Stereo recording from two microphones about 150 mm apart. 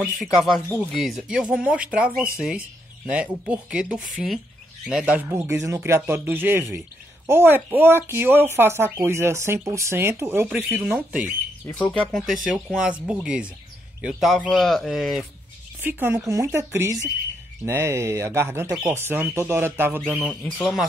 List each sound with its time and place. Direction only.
0.0 s speech: centre (ahead or behind)
0.7 s speech: 10° left (ahead or behind)
0.9 s speech: centre (ahead or behind)
5.3 s speech: 20° right (ahead or behind)
11.7 s speech: 10° left (ahead or behind)
15.8 s speech: 15° right (ahead or behind)
20.2 s speech: 5° left (ahead or behind)